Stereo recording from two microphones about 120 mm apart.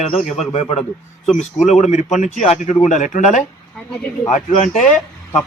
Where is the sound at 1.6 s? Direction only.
75° left (ahead or behind); by 4.9 s 90° left.